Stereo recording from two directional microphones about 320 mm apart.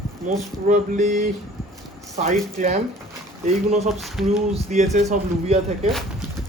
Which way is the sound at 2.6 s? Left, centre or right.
Right.